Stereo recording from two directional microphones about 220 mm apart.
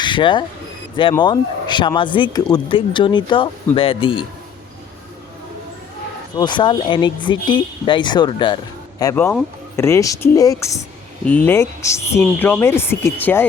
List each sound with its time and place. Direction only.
0.0 s speech: 20° left (ahead or behind)
6.3 s speech: 20° left (ahead or behind)